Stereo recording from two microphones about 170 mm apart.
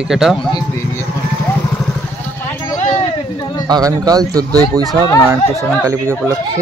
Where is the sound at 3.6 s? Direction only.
20° right (ahead or behind).